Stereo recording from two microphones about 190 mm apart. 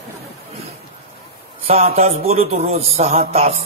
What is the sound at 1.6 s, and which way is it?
A man's voice, 30° right (ahead or behind).